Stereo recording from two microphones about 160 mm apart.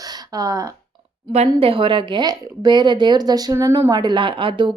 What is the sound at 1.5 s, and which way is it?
Speech, 35° right (ahead or behind).